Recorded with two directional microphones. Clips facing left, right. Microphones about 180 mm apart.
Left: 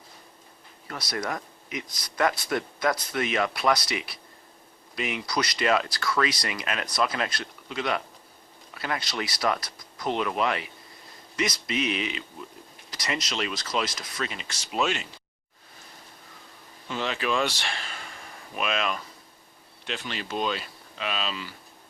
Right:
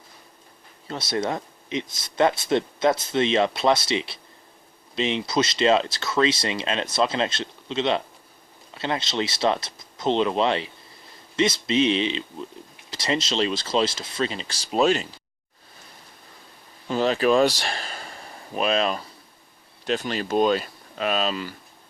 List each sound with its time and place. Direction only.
0.9 s speech: 25° right (ahead or behind)
16.9 s speech: 40° right (ahead or behind)